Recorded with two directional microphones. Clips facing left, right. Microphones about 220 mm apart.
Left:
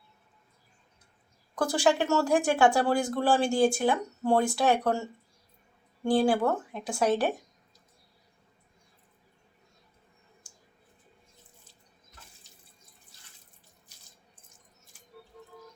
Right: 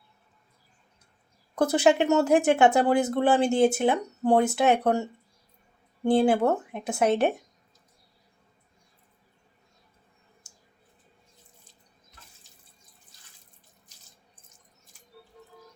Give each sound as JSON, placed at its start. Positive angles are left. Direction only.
{"t": 1.5, "sound": "speech", "side_deg": -20}
{"t": 6.1, "sound": "speech", "side_deg": -20}